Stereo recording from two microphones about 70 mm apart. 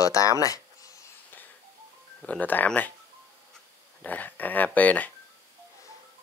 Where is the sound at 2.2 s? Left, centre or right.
Left.